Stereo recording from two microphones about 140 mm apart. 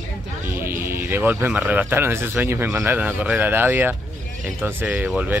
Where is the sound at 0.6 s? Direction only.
15° right (ahead or behind).